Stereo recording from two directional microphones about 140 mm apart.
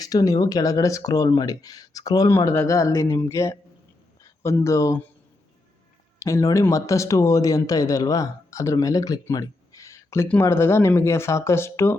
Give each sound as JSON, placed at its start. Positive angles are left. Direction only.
{"t": 0.0, "sound": "speech", "side_deg": 25}
{"t": 6.1, "sound": "speech", "side_deg": 20}